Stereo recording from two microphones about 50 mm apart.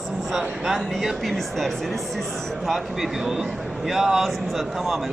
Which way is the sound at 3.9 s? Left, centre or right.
Centre.